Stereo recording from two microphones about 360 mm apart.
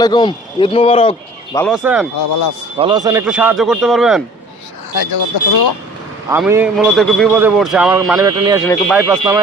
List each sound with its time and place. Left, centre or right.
0.0 s speech: centre
1.5 s a man's voice: centre
4.9 s speech: left
6.3 s a man's voice: centre
8.6 s speech: centre
9.0 s speech: centre